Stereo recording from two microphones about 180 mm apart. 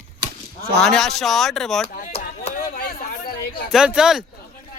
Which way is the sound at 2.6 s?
55° left (ahead or behind).